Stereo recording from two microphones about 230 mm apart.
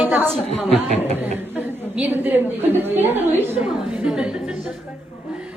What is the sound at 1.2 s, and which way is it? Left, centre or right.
A woman's voice, centre.